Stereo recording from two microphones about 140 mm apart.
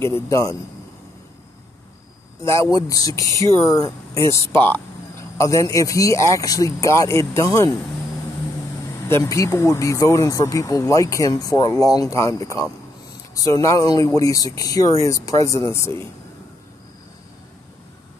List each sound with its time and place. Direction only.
0.3 s speech: 25° left (ahead or behind)
2.4 s speech: 20° left (ahead or behind)
9.1 s speech: 20° left (ahead or behind)